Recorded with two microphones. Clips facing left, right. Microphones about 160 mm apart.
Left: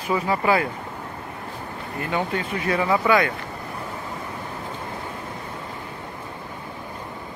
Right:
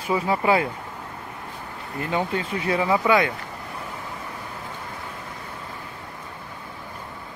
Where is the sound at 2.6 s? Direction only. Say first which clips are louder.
Even; 20° right (ahead or behind).